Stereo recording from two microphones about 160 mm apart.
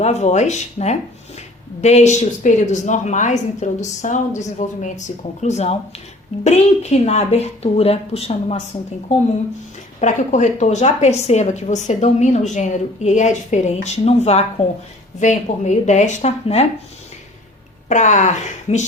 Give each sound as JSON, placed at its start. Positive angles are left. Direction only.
{"t": 0.0, "sound": "a woman's voice", "side_deg": 45}
{"t": 6.9, "sound": "a woman's voice", "side_deg": 45}
{"t": 17.8, "sound": "a woman's voice", "side_deg": 50}